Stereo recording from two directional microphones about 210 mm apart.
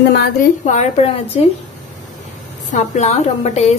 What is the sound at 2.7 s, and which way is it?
A woman's voice, 30° left (ahead or behind).